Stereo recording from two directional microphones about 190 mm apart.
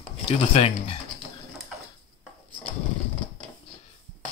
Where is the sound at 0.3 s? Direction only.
35° left (ahead or behind).